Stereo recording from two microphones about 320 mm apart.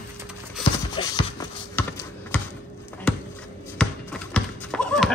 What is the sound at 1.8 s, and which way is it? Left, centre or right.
Computer keyboard, centre.